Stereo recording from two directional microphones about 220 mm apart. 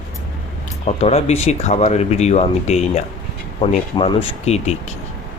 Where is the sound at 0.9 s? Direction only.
30° left (ahead or behind).